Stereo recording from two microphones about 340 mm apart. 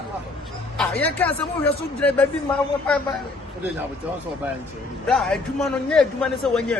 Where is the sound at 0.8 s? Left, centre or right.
Centre.